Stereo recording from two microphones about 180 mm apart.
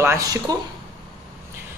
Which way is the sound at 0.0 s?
15° right (ahead or behind).